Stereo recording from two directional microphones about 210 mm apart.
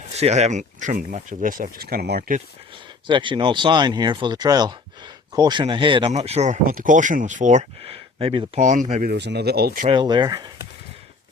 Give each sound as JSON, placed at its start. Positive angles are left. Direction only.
{"t": 0.2, "sound": "speech", "side_deg": -30}
{"t": 3.1, "sound": "speech", "side_deg": -20}
{"t": 8.6, "sound": "speech", "side_deg": -35}
{"t": 9.1, "sound": "speech", "side_deg": -55}
{"t": 9.8, "sound": "speech", "side_deg": -25}